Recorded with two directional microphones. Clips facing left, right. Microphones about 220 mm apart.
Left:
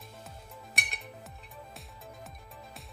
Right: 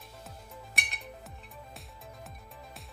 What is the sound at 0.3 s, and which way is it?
Music, centre (ahead or behind).